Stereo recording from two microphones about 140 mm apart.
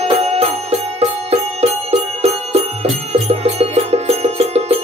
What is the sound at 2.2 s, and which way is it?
Music, 50° right (ahead or behind).